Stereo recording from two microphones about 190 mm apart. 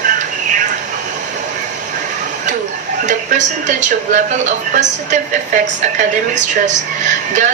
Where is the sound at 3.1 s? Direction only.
40° right (ahead or behind).